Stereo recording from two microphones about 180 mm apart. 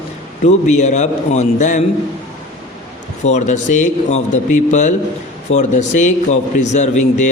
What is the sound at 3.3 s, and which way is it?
A man's voice, 40° left (ahead or behind).